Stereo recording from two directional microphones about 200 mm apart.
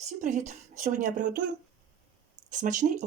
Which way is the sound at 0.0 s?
35° right (ahead or behind).